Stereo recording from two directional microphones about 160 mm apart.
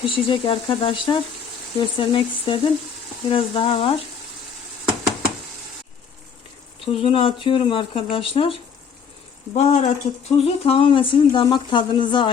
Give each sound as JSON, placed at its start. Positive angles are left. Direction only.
{"t": 0.0, "sound": "speech", "side_deg": 30}
{"t": 6.8, "sound": "speech", "side_deg": 35}
{"t": 9.6, "sound": "speech", "side_deg": 40}